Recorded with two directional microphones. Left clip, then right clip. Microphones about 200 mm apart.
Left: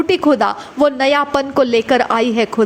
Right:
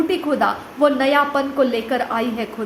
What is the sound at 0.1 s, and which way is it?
A woman's voice, 45° left (ahead or behind).